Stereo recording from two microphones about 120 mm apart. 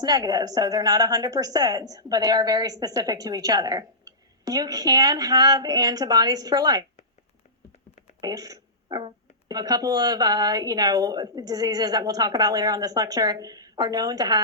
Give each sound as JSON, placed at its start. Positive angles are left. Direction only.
{"t": 0.0, "sound": "a woman's voice", "side_deg": -30}
{"t": 8.2, "sound": "a woman's voice", "side_deg": -30}